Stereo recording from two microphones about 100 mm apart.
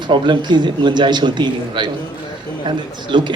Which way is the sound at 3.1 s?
50° right (ahead or behind).